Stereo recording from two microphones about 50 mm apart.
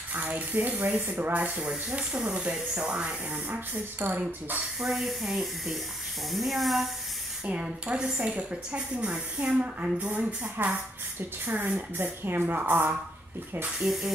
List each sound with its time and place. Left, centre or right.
0.1 s speech: right
1.7 s a woman's voice: centre
4.0 s a woman's voice: right
4.7 s speech: centre
7.8 s a woman's voice: right
13.8 s speech: centre